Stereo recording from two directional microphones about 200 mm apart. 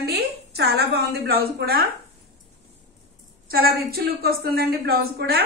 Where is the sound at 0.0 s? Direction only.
55° right (ahead or behind).